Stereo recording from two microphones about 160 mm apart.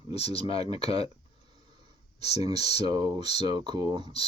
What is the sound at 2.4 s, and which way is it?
Speech, 25° right (ahead or behind).